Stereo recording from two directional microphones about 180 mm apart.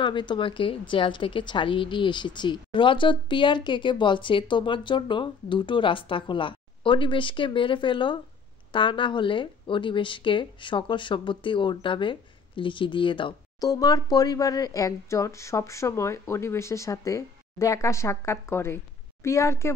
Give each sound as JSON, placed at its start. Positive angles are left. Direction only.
{"t": 0.0, "sound": "a woman's voice", "side_deg": 25}